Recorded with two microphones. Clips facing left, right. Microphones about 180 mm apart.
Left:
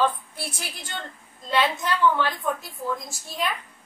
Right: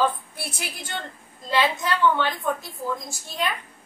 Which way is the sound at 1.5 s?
Centre (ahead or behind).